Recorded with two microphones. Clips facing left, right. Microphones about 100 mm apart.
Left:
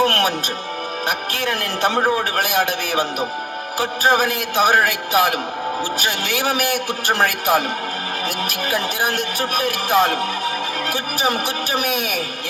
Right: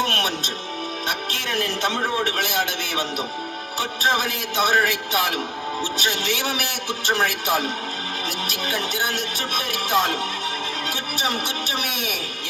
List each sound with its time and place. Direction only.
0.0 s music: 45° left (ahead or behind)
1.0 s speech: 45° left (ahead or behind)